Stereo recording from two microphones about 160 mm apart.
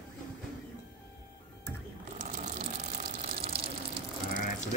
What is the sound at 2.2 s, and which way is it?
Water, 50° right (ahead or behind).